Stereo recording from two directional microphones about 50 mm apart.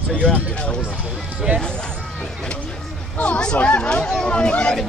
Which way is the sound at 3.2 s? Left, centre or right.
Left.